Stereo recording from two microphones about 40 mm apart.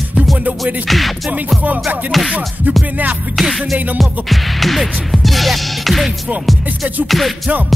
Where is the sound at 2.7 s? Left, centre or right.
Right.